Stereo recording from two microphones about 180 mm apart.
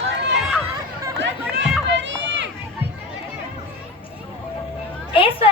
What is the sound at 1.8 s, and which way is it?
Run, 85° right.